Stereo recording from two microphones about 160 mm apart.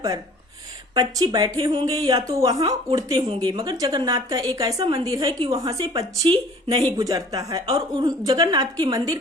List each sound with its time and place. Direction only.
0.9 s speech: 25° right (ahead or behind)